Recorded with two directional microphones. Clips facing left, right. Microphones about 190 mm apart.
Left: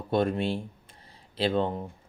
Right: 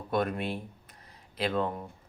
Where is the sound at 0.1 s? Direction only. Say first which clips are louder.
Left 4 dB; 25° left (ahead or behind).